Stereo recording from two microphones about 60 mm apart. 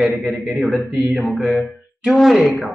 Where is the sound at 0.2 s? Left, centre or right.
Centre.